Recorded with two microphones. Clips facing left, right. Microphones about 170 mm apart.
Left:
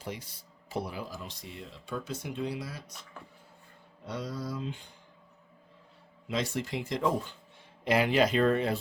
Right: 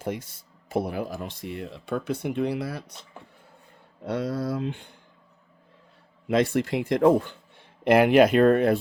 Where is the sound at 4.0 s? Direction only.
60° right (ahead or behind).